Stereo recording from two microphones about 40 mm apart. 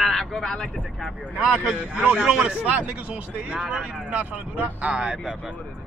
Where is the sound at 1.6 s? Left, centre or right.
Right.